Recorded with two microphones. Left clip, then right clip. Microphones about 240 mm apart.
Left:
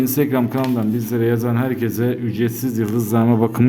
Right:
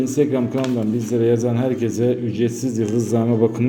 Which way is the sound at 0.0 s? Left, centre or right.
Left.